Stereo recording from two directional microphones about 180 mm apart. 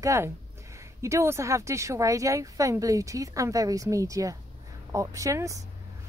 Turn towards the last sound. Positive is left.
turn(degrees=-15)  # may be behind; listen again after turning